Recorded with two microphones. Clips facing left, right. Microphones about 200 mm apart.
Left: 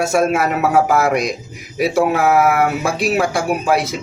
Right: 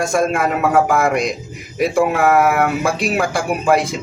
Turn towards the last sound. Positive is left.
turn(degrees=0)  # may be behind; listen again after turning